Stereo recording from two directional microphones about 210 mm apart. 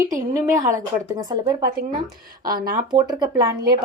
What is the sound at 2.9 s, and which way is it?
Speech, 20° right (ahead or behind).